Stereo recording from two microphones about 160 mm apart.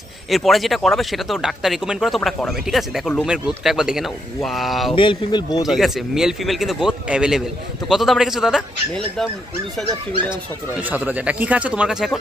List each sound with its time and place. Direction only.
0.3 s speech: centre (ahead or behind)
4.9 s speech: 30° left (ahead or behind)
5.7 s speech: centre (ahead or behind)
10.8 s speech: 10° right (ahead or behind)